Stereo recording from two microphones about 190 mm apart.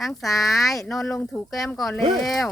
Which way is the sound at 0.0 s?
Centre (ahead or behind).